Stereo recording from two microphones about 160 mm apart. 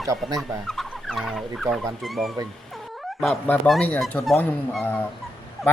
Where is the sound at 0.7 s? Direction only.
Centre (ahead or behind).